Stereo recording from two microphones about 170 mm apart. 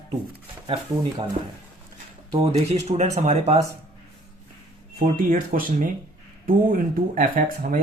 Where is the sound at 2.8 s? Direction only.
40° right (ahead or behind).